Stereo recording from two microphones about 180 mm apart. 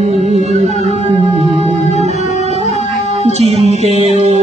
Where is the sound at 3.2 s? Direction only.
35° right (ahead or behind).